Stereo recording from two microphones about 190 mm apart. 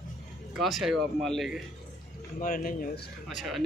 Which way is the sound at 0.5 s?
Centre (ahead or behind).